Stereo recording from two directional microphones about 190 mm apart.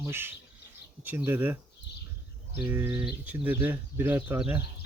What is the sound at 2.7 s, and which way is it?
Speech, 10° right (ahead or behind).